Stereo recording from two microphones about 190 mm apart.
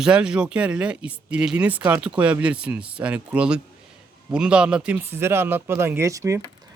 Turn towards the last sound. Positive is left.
turn(degrees=-15)  # may be behind; listen again after turning